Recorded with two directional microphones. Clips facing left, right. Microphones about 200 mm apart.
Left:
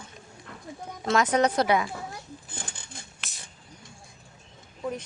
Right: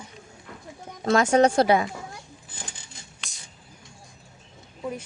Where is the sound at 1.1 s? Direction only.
30° right (ahead or behind).